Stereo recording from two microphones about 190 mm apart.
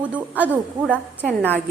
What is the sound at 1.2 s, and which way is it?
Speech, 10° left (ahead or behind).